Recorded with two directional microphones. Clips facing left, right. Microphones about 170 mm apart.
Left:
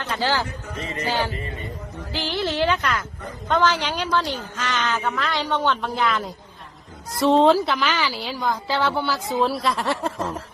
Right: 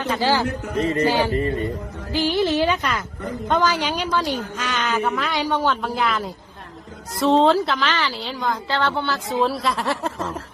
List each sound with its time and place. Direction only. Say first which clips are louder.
0.2 s a woman's voice: right 2 dB; 15° right (ahead or behind)
0.8 s music: right 11 dB; 35° right (ahead or behind)
2.1 s a woman's voice: right 5 dB; 15° right (ahead or behind)